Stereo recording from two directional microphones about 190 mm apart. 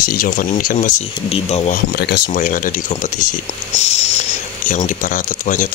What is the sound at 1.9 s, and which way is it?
Speech, 50° left (ahead or behind).